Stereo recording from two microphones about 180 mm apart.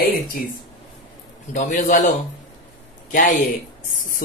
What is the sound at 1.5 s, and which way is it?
A man's voice, 45° left (ahead or behind).